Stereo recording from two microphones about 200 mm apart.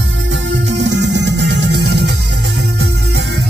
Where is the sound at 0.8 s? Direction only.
60° right (ahead or behind).